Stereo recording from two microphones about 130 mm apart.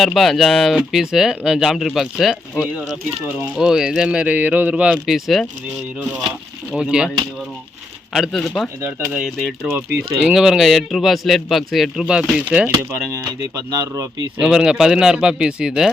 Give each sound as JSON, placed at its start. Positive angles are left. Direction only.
{"t": 0.0, "sound": "speech", "side_deg": 0}
{"t": 6.7, "sound": "speech", "side_deg": -5}
{"t": 8.1, "sound": "speech", "side_deg": 0}
{"t": 13.7, "sound": "speech", "side_deg": -25}
{"t": 14.4, "sound": "speech", "side_deg": -5}